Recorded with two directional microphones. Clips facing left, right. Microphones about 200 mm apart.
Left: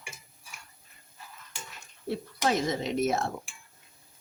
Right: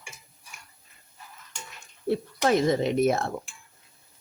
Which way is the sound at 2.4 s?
55° right (ahead or behind).